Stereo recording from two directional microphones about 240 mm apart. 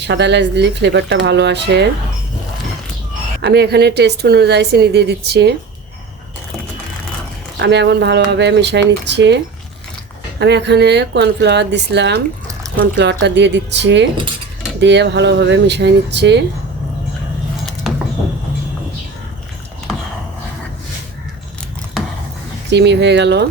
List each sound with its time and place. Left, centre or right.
0.0 s a woman's voice: right
3.4 s a woman's voice: right
7.6 s a woman's voice: right
22.7 s a woman's voice: right